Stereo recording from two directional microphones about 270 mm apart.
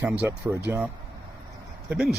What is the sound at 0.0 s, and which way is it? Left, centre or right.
Speech, centre.